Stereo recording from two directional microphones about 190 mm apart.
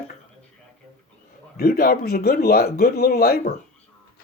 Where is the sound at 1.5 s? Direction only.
55° left (ahead or behind).